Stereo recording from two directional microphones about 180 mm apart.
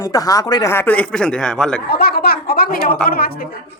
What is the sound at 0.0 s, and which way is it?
Speech, 20° left (ahead or behind).